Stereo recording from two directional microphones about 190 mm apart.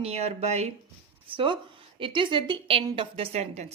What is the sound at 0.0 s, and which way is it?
A woman's voice, 35° right (ahead or behind).